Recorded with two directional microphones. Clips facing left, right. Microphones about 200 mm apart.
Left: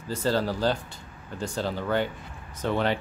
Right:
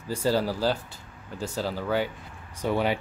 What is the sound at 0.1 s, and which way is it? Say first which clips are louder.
Speech: right 1 dB; 10° right (ahead or behind).